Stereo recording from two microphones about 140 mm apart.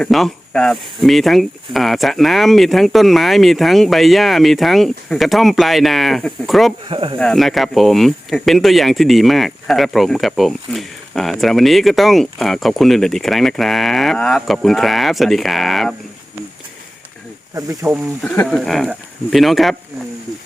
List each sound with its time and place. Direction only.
0.0 s speech: 5° left (ahead or behind)
6.8 s speech: 40° right (ahead or behind)
7.2 s speech: 5° left (ahead or behind)
17.5 s speech: 25° right (ahead or behind)
18.4 s speech: centre (ahead or behind)